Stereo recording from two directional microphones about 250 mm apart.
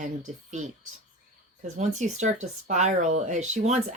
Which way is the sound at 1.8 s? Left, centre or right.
Right.